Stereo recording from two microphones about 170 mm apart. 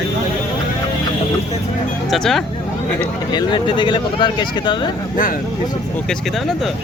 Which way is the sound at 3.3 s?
30° left (ahead or behind).